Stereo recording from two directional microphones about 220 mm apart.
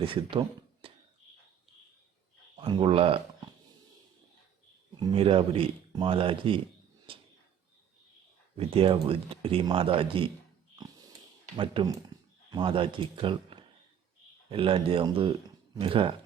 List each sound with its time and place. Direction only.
0.0 s speech: 25° right (ahead or behind)
2.6 s speech: 25° right (ahead or behind)
4.9 s speech: 20° right (ahead or behind)
7.1 s a sound: 25° right (ahead or behind)
8.5 s speech: 25° right (ahead or behind)
11.5 s speech: 20° right (ahead or behind)